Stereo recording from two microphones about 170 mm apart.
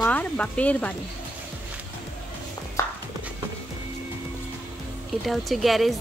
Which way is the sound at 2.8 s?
20° left (ahead or behind).